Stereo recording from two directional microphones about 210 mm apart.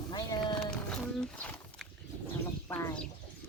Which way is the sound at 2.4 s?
10° left (ahead or behind).